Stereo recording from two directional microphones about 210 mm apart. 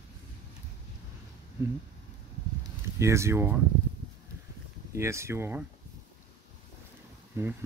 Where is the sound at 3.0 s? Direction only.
15° right (ahead or behind).